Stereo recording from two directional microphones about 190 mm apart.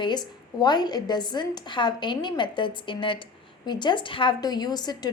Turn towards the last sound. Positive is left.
turn(degrees=20)  # may be behind; listen again after turning